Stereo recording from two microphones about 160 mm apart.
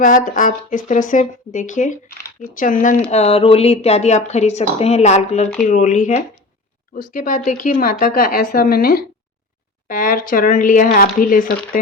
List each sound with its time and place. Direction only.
0.0 s speech: 55° left (ahead or behind)
3.1 s speech: 40° left (ahead or behind)
6.9 s speech: 60° left (ahead or behind)
9.9 s speech: 55° left (ahead or behind)